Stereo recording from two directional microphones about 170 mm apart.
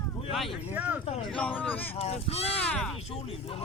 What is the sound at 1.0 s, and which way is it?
Speech, 35° left (ahead or behind).